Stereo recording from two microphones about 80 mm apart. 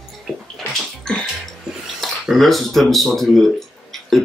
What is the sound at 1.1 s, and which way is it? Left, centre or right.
Music, centre.